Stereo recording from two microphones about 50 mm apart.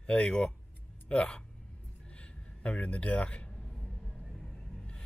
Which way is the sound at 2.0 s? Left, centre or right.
Left.